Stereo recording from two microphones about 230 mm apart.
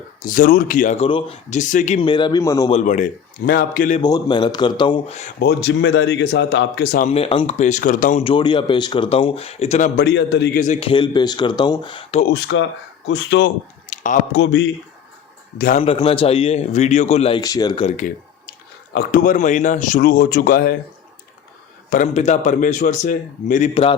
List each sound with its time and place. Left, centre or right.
0.2 s speech: left; by 2.6 s centre
2.6 s speech: left
4.0 s speech: centre
5.4 s speech: left
7.1 s speech: left
8.2 s speech: left
10.6 s speech: left
12.3 s speech: left
13.9 s a sound: left
14.3 s speech: left
15.5 s speech: left
15.8 s speech: left
21.8 s speech: left